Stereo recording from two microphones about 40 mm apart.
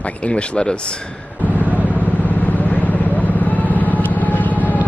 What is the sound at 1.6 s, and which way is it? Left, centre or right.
Vehicle, right.